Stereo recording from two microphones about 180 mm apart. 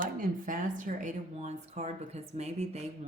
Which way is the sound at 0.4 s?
45° right (ahead or behind).